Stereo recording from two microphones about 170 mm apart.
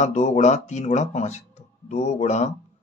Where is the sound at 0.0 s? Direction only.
45° left (ahead or behind).